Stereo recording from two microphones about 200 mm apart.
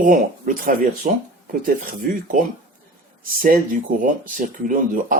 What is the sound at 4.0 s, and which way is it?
Speech, 45° right (ahead or behind).